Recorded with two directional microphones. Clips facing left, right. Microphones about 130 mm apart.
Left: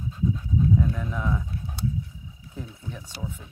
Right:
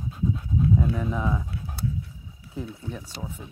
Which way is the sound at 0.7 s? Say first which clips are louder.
Right 1 dB; 10° right (ahead or behind).